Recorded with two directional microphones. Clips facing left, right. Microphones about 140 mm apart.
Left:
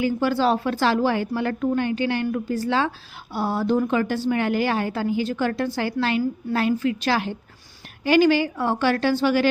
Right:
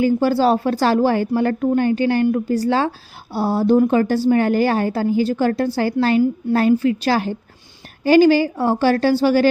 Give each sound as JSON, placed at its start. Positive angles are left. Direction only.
{"t": 0.0, "sound": "a woman's voice", "side_deg": -40}